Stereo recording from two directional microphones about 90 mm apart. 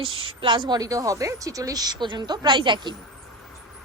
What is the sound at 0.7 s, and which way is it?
A woman's voice, 40° right (ahead or behind).